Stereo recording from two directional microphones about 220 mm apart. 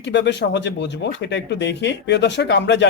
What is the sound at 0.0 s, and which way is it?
Speech, 50° left (ahead or behind).